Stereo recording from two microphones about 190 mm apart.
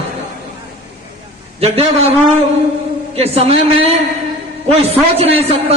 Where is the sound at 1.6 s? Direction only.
35° right (ahead or behind).